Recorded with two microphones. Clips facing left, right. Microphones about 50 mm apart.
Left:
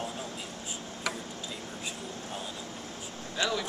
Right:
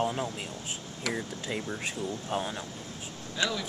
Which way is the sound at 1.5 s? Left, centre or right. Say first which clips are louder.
Right 10 dB; right.